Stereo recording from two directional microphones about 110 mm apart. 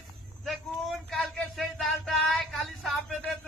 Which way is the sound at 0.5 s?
Centre (ahead or behind).